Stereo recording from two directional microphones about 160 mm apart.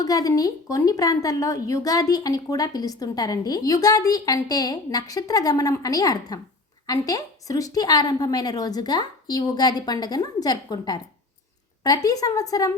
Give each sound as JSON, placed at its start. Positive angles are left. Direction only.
{"t": 0.0, "sound": "a woman's voice", "side_deg": 20}
{"t": 12.0, "sound": "a woman's voice", "side_deg": 20}